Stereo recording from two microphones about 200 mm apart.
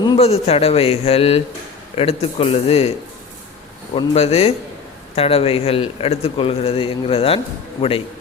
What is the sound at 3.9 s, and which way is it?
A man's voice, 30° left (ahead or behind).